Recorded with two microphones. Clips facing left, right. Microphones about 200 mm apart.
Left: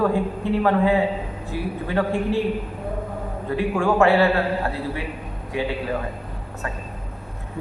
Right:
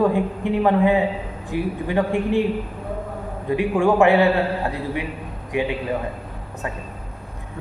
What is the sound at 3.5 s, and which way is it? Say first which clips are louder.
Speech: right 3 dB; 15° right (ahead or behind).